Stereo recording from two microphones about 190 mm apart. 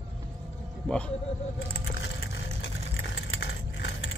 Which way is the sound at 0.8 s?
5° left (ahead or behind).